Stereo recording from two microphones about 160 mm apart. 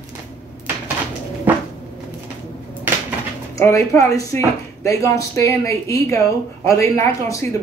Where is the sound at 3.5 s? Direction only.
20° left (ahead or behind).